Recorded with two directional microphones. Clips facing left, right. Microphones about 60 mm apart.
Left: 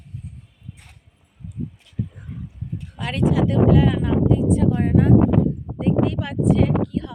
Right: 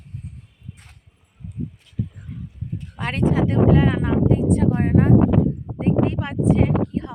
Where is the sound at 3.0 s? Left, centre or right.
Right.